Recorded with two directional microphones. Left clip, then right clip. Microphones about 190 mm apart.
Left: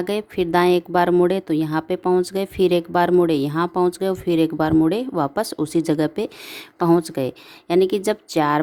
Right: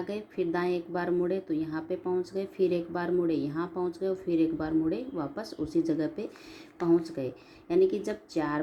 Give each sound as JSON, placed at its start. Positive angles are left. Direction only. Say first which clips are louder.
{"t": 0.0, "sound": "a woman's voice", "louder": "left 10 dB", "side_deg": 45}